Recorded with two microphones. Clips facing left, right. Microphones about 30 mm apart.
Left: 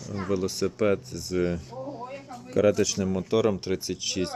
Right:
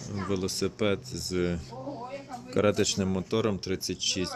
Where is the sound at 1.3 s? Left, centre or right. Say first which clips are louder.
Left 3 dB; centre.